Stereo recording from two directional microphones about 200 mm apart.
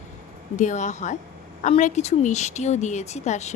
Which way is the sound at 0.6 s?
40° left (ahead or behind).